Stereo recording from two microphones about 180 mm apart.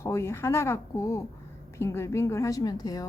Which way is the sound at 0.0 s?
15° left (ahead or behind).